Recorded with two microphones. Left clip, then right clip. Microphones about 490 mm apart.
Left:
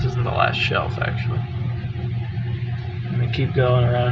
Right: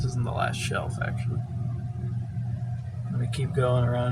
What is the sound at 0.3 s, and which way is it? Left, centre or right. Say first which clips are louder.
Speech: left 10 dB; right.